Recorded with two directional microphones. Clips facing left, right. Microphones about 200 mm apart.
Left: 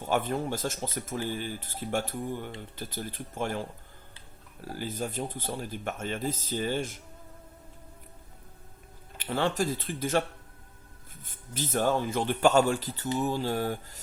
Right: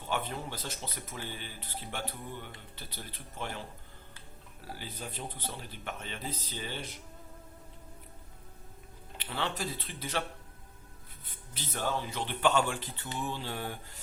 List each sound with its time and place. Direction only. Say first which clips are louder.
0.1 s speech: left 7 dB; 45° left (ahead or behind)
9.1 s speech: left 8 dB; 45° left (ahead or behind)
11.3 s speech: left 10 dB; 45° left (ahead or behind)